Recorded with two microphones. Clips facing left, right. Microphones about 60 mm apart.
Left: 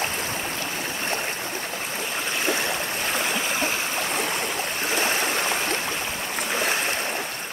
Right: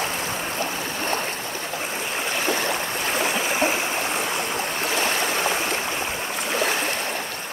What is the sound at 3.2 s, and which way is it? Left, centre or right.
Stream, centre.